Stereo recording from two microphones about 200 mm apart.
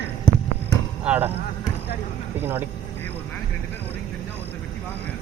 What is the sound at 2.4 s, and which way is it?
Speech, 10° right (ahead or behind).